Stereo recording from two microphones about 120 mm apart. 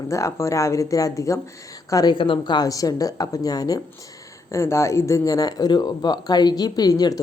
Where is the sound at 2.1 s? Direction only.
45° left (ahead or behind).